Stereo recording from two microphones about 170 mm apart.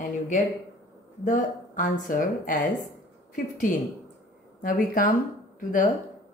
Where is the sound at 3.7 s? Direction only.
50° left (ahead or behind).